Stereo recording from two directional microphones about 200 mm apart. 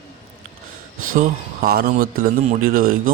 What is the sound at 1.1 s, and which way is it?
Speech, 50° right (ahead or behind).